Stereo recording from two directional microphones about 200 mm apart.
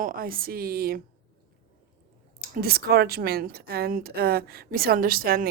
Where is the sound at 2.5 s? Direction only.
50° right (ahead or behind).